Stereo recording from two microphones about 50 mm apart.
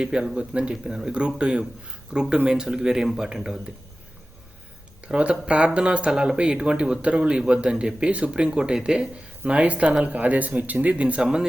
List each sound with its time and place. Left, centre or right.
0.0 s speech: centre
5.0 s speech: right
9.5 s a man's voice: right
11.2 s speech: centre